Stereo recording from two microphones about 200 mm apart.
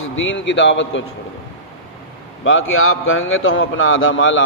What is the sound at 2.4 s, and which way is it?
A man's voice, 85° left.